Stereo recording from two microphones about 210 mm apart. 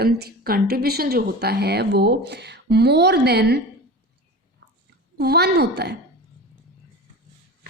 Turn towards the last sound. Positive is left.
turn(degrees=-50)  # may be behind; listen again after turning